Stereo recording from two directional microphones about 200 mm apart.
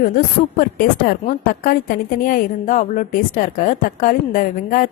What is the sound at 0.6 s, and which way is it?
A woman's voice, 45° left (ahead or behind).